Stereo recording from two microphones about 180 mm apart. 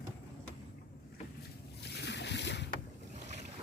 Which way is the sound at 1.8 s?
70° left (ahead or behind).